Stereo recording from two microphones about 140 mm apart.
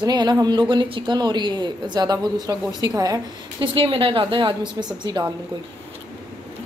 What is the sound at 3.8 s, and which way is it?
Speech, 40° right (ahead or behind).